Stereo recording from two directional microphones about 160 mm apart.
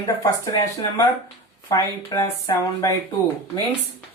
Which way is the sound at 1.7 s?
20° left (ahead or behind).